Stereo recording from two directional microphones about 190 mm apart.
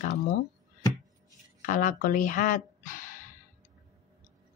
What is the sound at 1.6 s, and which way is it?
Speech, 45° left (ahead or behind).